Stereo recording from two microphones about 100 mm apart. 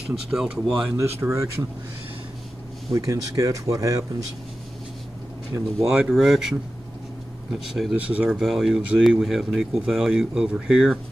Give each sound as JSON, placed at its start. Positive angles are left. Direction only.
{"t": 0.1, "sound": "speech", "side_deg": -5}
{"t": 1.2, "sound": "speech", "side_deg": -30}
{"t": 2.9, "sound": "speech", "side_deg": -30}
{"t": 5.5, "sound": "speech", "side_deg": -30}
{"t": 5.9, "sound": "speech", "side_deg": -5}
{"t": 7.9, "sound": "speech", "side_deg": -15}
{"t": 8.3, "sound": "speech", "side_deg": 0}